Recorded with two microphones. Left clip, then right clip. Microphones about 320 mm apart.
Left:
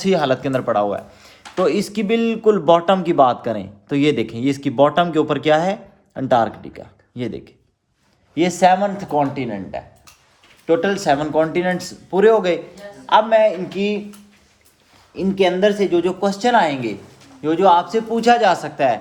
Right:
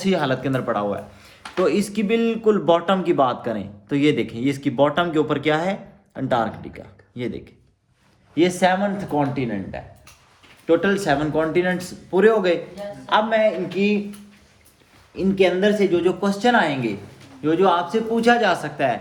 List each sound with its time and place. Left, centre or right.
0.0 s speech: left
15.1 s speech: left